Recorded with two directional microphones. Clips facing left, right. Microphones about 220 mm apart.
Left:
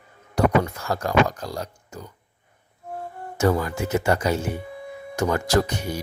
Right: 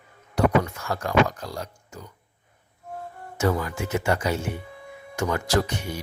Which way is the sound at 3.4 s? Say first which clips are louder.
Left 3 dB; 40° left (ahead or behind).